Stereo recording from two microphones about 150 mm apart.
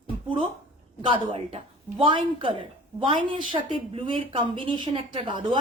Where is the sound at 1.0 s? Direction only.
35° right (ahead or behind).